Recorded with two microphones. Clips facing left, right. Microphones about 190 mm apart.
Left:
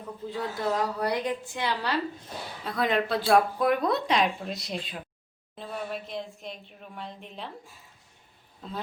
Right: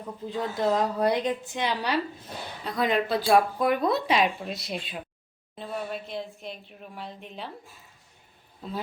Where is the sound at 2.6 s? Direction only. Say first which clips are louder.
Right 1 dB; centre (ahead or behind).